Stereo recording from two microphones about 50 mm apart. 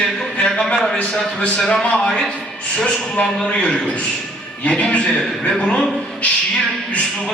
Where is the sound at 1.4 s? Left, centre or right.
Centre.